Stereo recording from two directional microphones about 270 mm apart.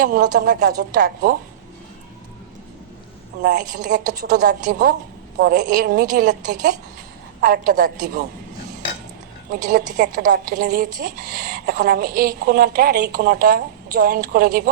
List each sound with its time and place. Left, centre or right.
0.0 s a woman's voice: right
3.4 s a woman's voice: right
9.5 s a woman's voice: right